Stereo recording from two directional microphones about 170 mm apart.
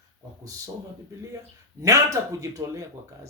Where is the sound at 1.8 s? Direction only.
20° right (ahead or behind).